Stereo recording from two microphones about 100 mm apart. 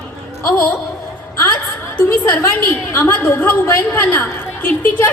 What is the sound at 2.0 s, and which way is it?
A woman's voice, 25° left (ahead or behind).